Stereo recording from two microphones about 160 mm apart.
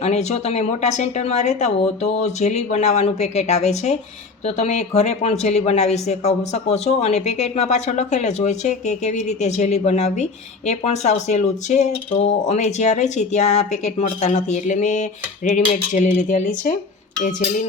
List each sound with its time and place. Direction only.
0.0 s speech: 45° left (ahead or behind)